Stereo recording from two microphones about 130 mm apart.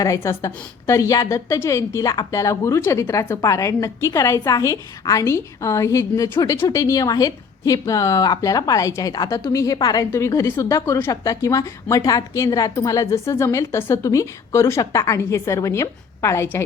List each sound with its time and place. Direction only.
0.0 s a woman's voice: 25° left (ahead or behind)